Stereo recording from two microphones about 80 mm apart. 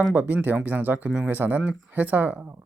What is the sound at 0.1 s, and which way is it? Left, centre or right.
Speech, centre.